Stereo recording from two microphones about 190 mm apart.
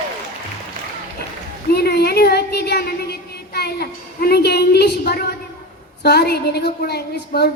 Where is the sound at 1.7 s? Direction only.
55° left (ahead or behind).